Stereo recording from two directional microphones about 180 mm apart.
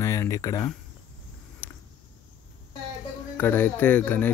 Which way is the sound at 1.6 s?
10° left (ahead or behind).